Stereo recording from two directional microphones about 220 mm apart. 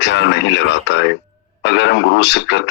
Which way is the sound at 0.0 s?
55° left (ahead or behind).